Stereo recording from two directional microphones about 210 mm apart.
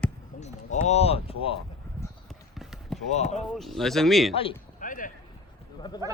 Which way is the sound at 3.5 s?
Centre (ahead or behind).